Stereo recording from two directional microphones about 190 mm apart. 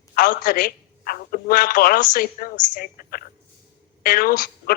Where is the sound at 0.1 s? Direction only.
45° left (ahead or behind).